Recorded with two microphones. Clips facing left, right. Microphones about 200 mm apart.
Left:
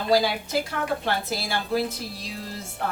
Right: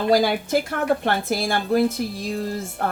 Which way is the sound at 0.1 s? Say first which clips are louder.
Right 3 dB; 50° right (ahead or behind).